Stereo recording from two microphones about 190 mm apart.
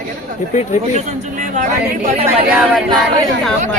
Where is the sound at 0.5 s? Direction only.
40° left (ahead or behind).